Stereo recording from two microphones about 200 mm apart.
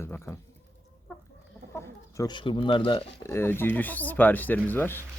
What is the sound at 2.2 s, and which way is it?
Speech, 25° left (ahead or behind).